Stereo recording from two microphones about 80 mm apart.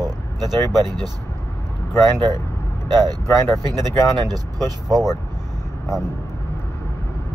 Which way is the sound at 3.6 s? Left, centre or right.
Right.